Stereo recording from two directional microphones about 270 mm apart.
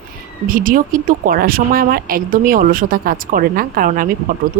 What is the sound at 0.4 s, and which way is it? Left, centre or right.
Speech, right.